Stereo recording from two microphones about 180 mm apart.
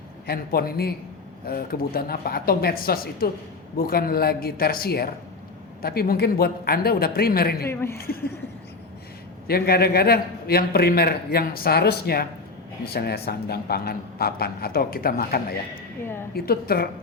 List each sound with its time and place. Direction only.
0.3 s a man's voice: 60° left (ahead or behind)
7.7 s a woman's voice: 15° left (ahead or behind)
7.9 s a man's voice: 55° left (ahead or behind)
9.5 s a man's voice: 60° left (ahead or behind)